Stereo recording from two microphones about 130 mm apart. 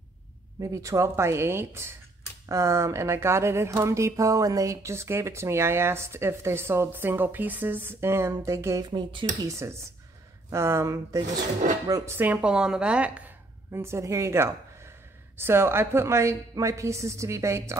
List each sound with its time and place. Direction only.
0.6 s speech: 25° right (ahead or behind)
9.5 s speech: 20° right (ahead or behind)
13.7 s a woman's voice: 20° right (ahead or behind)